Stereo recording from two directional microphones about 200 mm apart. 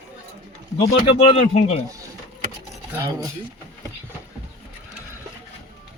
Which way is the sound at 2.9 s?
15° right (ahead or behind).